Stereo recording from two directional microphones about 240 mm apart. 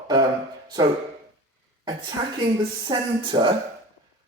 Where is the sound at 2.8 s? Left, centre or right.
Centre.